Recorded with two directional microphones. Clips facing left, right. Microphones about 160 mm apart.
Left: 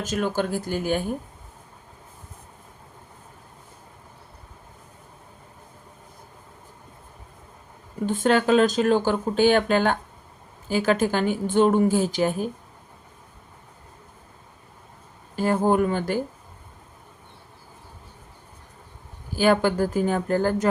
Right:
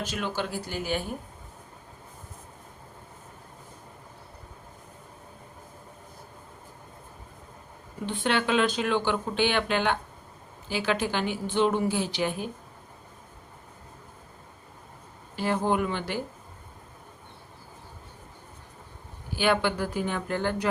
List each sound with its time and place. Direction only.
0.0 s speech: 45° left (ahead or behind)
8.0 s speech: 45° left (ahead or behind)
15.4 s speech: 45° left (ahead or behind)
19.3 s speech: 40° left (ahead or behind)